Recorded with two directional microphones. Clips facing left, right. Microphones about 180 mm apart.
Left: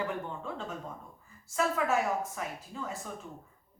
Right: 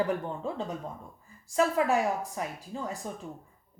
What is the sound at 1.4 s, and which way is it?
A woman's voice, 35° right (ahead or behind).